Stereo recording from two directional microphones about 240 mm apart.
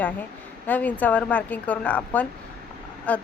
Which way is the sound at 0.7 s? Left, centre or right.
Centre.